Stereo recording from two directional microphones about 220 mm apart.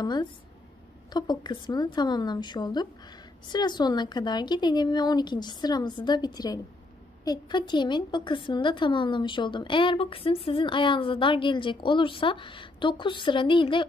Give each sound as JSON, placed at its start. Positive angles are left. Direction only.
{"t": 0.0, "sound": "speech", "side_deg": 20}